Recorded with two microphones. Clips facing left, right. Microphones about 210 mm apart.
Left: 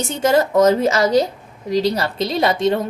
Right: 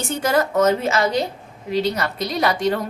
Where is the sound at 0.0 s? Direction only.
25° left (ahead or behind).